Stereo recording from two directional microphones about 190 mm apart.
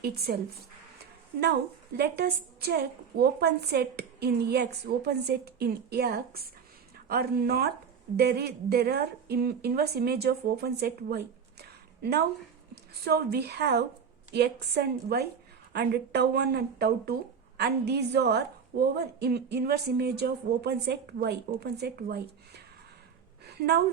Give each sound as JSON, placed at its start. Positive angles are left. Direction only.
{"t": 0.3, "sound": "speech", "side_deg": -55}
{"t": 2.0, "sound": "a woman's voice", "side_deg": -55}